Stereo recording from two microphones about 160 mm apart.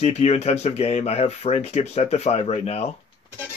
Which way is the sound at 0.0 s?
40° left (ahead or behind).